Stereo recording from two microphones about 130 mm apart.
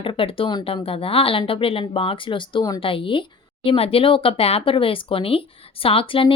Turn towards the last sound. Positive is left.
turn(degrees=45)  # may be behind; listen again after turning